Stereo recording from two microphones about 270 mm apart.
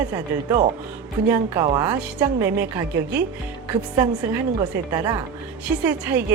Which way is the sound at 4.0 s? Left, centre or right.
Centre.